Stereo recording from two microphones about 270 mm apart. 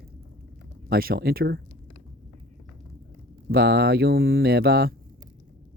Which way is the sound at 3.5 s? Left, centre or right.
Right.